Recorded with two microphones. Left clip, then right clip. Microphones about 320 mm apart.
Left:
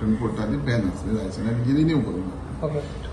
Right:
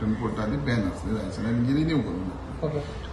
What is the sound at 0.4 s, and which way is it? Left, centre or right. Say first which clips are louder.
A man's voice: left 2 dB; centre.